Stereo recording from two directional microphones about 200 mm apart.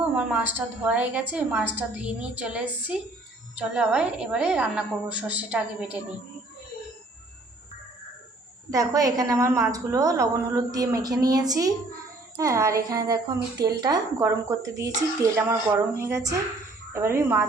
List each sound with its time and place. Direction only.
0.0 s a woman's voice: 5° right (ahead or behind)
8.7 s speech: 15° right (ahead or behind)